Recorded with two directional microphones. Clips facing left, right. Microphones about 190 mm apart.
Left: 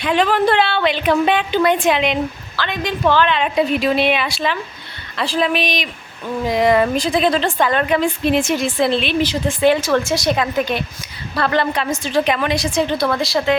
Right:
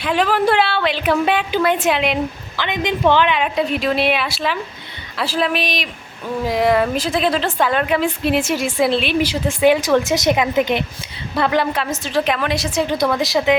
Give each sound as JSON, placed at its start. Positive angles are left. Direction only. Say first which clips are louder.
{"t": 0.0, "sound": "speech", "louder": "left 1 dB", "side_deg": -5}
{"t": 2.6, "sound": "a woman's voice", "louder": "right 2 dB", "side_deg": -15}
{"t": 3.4, "sound": "speech", "louder": "left 2 dB", "side_deg": 0}
{"t": 13.0, "sound": "a woman's voice", "louder": "right 1 dB", "side_deg": -15}